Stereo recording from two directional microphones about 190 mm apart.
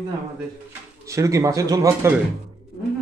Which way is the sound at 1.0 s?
15° right (ahead or behind).